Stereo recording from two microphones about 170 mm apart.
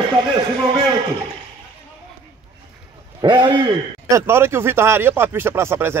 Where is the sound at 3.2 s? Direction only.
25° right (ahead or behind).